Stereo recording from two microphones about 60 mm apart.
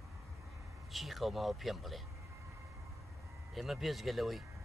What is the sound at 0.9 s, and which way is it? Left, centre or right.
Speech, centre.